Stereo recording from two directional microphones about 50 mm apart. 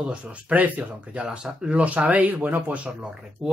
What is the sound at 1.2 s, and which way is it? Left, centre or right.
Speech, centre.